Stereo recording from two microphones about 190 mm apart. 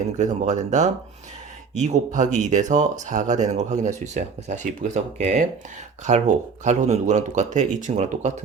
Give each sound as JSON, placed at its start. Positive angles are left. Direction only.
{"t": 0.2, "sound": "speech", "side_deg": -40}